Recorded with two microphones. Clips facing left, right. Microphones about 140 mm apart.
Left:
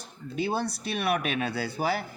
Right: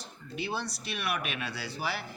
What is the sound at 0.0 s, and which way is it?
Speech, 50° left (ahead or behind).